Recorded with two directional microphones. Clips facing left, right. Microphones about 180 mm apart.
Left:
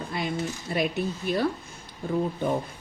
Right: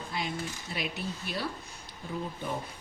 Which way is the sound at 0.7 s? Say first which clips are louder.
Left 10 dB; 50° left (ahead or behind).